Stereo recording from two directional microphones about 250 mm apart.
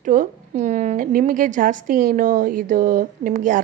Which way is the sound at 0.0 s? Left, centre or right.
Right.